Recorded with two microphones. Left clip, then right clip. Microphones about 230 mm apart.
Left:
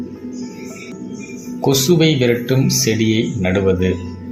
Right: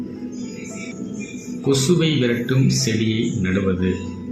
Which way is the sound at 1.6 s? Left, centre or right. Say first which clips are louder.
Left 5 dB; left.